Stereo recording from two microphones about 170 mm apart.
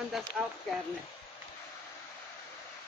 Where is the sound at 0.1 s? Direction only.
Centre (ahead or behind).